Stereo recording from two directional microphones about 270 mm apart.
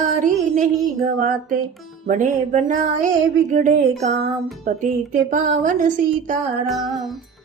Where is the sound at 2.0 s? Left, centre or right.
Right.